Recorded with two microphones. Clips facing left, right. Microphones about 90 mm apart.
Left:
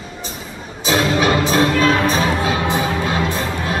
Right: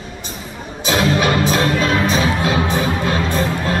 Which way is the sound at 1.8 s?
40° left (ahead or behind).